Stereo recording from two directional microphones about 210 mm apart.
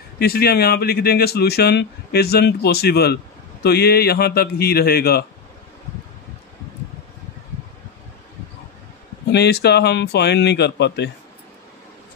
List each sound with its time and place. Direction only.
0.2 s speech: 45° left (ahead or behind)
9.3 s speech: 50° left (ahead or behind)